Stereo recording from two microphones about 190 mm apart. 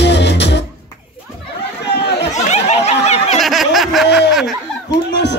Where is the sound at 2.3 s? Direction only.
35° left (ahead or behind).